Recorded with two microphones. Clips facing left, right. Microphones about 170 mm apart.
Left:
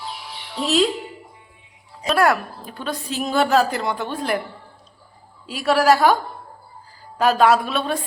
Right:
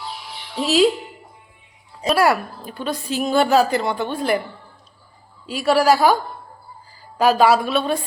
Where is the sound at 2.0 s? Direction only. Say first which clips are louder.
Right 1 dB; 5° right (ahead or behind).